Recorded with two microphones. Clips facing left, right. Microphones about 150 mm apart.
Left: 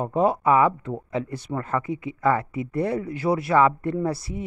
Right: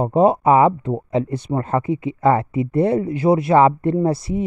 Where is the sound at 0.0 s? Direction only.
20° right (ahead or behind).